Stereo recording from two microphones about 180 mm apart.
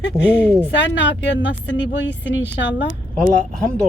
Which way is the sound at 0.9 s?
80° left.